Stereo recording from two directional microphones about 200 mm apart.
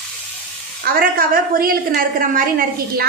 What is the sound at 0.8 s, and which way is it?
A woman's voice, 45° right (ahead or behind).